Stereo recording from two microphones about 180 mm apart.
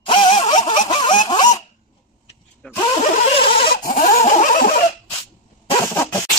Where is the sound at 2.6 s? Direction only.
5° left (ahead or behind).